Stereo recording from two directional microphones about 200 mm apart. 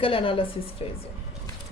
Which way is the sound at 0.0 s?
25° left (ahead or behind).